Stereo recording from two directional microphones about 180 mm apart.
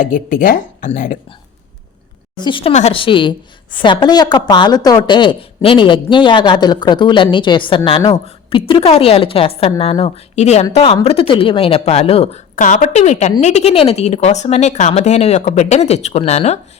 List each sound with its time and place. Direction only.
0.0 s speech: 45° left (ahead or behind)
2.4 s a woman's voice: 30° left (ahead or behind)